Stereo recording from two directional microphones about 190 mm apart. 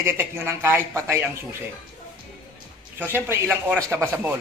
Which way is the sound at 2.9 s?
10° right (ahead or behind).